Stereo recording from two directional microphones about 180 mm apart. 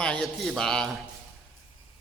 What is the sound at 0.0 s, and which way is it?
Speech, 5° left (ahead or behind).